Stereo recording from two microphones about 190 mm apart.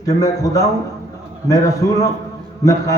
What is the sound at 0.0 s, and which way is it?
A man's voice, 20° left (ahead or behind).